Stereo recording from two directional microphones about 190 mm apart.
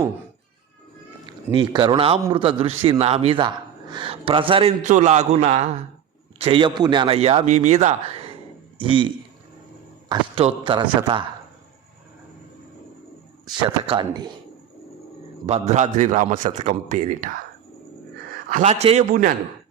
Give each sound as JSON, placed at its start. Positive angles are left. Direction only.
{"t": 1.5, "sound": "a man's voice", "side_deg": -25}
{"t": 13.8, "sound": "speech", "side_deg": -25}
{"t": 15.4, "sound": "a man's voice", "side_deg": -35}
{"t": 18.5, "sound": "a man's voice", "side_deg": -35}